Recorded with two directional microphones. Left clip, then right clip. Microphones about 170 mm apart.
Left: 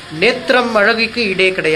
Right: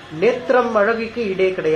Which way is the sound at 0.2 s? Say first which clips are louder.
Left 3 dB; 15° left (ahead or behind).